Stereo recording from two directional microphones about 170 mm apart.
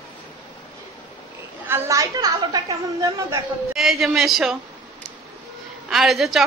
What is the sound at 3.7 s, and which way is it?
Speech, centre (ahead or behind).